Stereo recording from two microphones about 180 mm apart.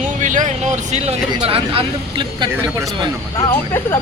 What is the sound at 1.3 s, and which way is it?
Speech, 30° right (ahead or behind).